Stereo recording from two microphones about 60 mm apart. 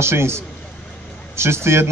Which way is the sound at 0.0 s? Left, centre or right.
Right.